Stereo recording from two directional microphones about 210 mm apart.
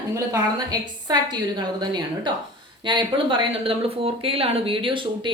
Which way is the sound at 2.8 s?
25° right (ahead or behind).